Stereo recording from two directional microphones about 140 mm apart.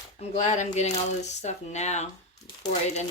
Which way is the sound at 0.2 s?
50° left (ahead or behind).